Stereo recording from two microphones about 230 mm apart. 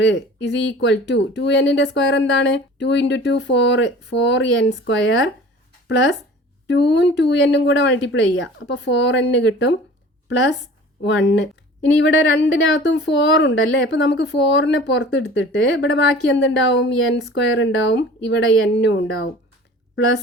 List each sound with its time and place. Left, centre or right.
0.0 s speech: left
6.7 s speech: left
11.0 s speech: left